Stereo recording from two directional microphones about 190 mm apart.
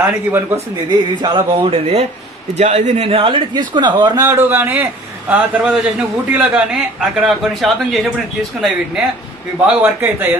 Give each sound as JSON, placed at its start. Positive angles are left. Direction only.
{"t": 0.0, "sound": "speech", "side_deg": -10}
{"t": 0.8, "sound": "a man's voice", "side_deg": -25}